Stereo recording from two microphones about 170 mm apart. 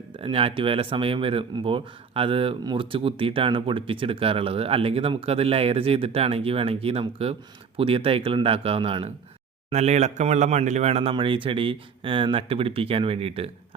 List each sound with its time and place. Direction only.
0.2 s speech: 35° right (ahead or behind)